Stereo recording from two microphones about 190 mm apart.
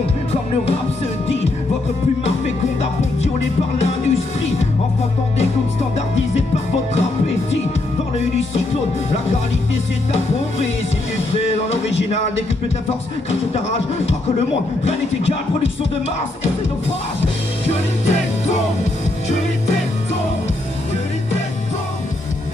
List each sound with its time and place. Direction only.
2.2 s music: 35° left (ahead or behind)
5.9 s music: 35° left (ahead or behind)
14.9 s music: 35° left (ahead or behind)